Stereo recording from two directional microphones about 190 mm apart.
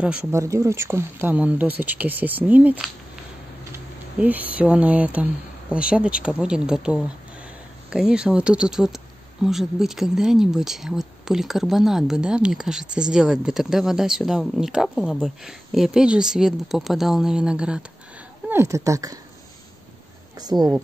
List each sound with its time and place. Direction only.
0.0 s speech: 10° right (ahead or behind)
20.3 s speech: 20° right (ahead or behind)